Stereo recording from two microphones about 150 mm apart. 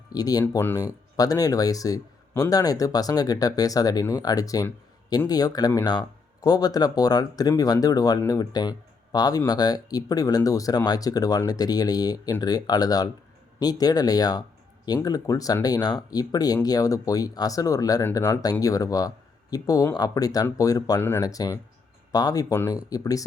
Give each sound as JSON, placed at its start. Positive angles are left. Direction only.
{"t": 0.1, "sound": "speech", "side_deg": 25}
{"t": 0.4, "sound": "speech", "side_deg": 15}